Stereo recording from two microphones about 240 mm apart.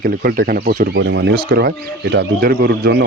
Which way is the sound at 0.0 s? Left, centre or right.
Right.